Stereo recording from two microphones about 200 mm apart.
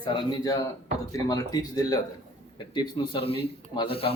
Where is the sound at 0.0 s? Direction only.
20° left (ahead or behind).